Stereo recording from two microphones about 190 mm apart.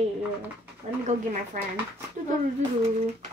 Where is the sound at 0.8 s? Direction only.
35° right (ahead or behind).